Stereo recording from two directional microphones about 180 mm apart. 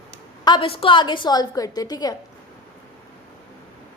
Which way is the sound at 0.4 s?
25° left (ahead or behind).